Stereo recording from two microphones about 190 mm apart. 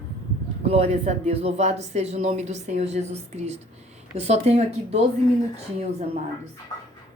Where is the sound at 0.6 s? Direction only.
35° right (ahead or behind).